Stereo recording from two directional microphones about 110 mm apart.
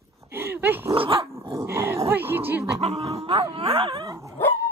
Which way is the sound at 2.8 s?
70° right (ahead or behind).